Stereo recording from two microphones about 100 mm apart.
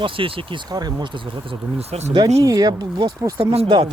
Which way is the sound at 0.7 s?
45° right (ahead or behind).